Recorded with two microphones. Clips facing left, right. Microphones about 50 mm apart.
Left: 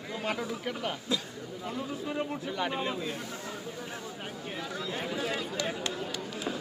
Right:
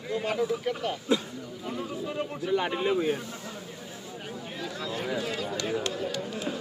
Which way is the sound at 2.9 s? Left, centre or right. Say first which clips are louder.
Right 8 dB; right.